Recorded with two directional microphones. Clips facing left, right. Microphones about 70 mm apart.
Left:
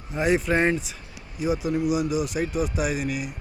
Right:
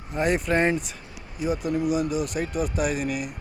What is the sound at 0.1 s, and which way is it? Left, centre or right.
Speech, centre.